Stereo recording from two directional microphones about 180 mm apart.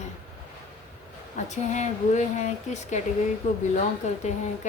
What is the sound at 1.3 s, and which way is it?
Speech, 40° left (ahead or behind).